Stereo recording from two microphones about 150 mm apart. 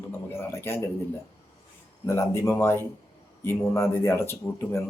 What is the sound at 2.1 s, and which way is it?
Speech, 20° left (ahead or behind).